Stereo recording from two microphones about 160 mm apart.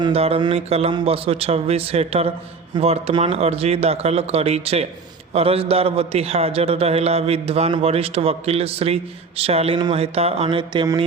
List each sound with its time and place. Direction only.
0.0 s a man's voice: 40° right (ahead or behind)